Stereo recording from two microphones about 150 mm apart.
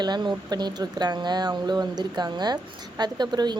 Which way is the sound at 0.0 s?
30° right (ahead or behind).